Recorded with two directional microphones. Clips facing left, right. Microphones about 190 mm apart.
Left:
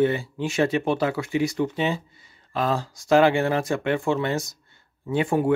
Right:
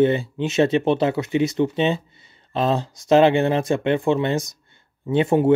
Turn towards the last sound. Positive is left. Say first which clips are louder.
# right 4 dB
turn(degrees=-25)  # may be behind; listen again after turning